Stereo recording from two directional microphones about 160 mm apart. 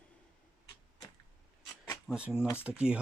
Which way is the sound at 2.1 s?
5° right (ahead or behind).